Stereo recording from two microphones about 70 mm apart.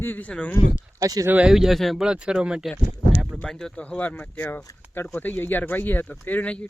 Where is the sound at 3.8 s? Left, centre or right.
Left.